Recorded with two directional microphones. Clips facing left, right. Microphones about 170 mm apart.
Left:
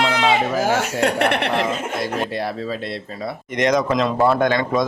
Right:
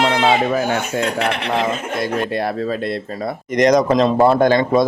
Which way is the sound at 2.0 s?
55° right (ahead or behind).